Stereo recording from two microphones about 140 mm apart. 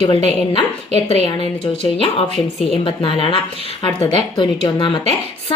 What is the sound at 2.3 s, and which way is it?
Speech, centre (ahead or behind).